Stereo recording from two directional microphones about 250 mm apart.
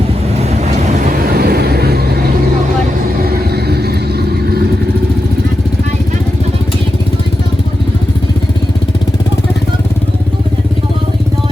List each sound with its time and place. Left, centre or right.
1.1 s vehicle: right
3.2 s vehicle: right